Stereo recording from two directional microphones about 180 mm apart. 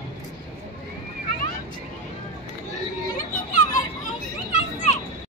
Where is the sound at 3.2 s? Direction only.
45° left (ahead or behind).